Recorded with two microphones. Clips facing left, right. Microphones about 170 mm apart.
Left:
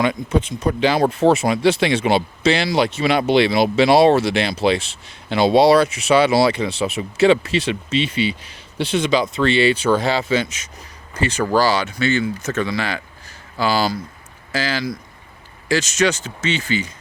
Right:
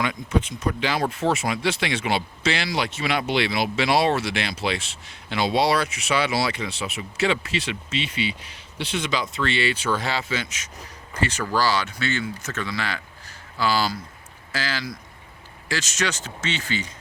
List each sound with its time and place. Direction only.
0.0 s speech: 30° left (ahead or behind)
11.2 s speech: 20° left (ahead or behind)